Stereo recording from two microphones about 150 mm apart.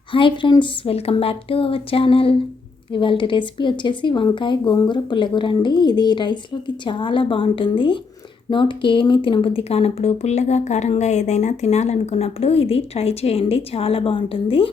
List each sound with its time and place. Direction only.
0.1 s speech: 35° left (ahead or behind)